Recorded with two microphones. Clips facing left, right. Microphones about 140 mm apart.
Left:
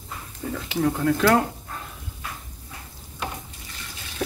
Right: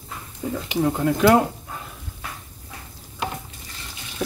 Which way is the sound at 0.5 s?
20° right (ahead or behind).